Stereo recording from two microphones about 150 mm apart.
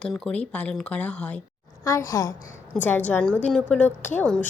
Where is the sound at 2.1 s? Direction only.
20° left (ahead or behind).